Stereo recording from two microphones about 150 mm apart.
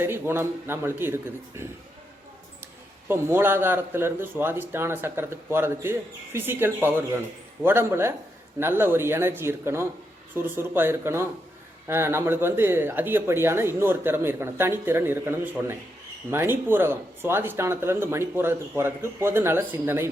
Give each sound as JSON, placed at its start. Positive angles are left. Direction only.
{"t": 0.0, "sound": "speech", "side_deg": -15}
{"t": 3.1, "sound": "speech", "side_deg": -15}